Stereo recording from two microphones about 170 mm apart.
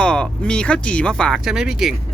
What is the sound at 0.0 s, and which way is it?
Speech, 5° left (ahead or behind).